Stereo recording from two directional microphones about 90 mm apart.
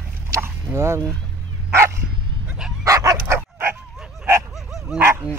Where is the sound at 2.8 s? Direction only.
35° right (ahead or behind).